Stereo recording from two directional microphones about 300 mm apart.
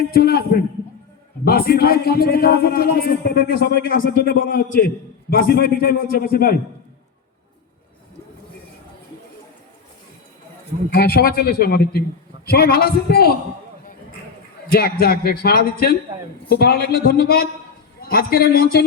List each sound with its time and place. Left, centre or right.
0.1 s a man's voice: left
10.9 s a man's voice: left
14.7 s a man's voice: left